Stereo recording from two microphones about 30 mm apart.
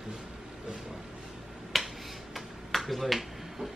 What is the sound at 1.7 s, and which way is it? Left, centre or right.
Finger snapping, centre.